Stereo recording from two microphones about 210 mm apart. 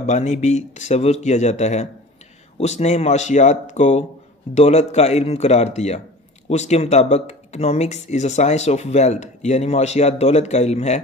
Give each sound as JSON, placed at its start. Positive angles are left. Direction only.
{"t": 0.0, "sound": "speech", "side_deg": 35}